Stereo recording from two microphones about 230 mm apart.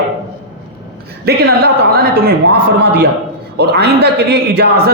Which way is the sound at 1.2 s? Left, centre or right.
Right.